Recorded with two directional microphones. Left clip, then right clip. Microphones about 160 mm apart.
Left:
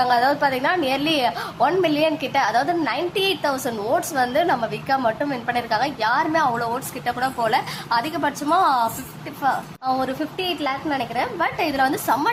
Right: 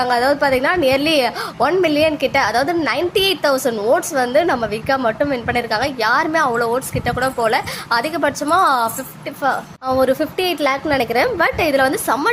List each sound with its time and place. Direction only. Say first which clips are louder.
0.0 s a woman's voice: right 2 dB; 20° right (ahead or behind)